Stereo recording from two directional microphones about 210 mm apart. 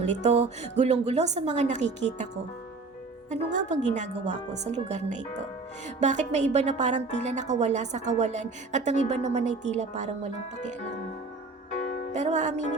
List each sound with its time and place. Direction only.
0.0 s a woman's voice: 35° right (ahead or behind)
3.2 s a woman's voice: 35° right (ahead or behind)
12.1 s a woman's voice: 35° right (ahead or behind)